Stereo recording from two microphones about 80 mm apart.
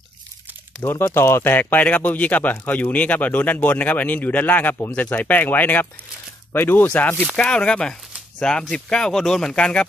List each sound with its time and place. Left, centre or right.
0.8 s speech: left; by 9.8 s centre